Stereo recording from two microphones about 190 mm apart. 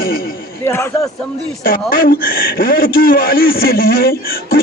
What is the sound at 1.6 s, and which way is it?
A man's voice, 50° left (ahead or behind).